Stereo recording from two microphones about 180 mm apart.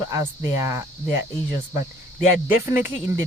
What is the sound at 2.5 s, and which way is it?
Speech, 15° right (ahead or behind).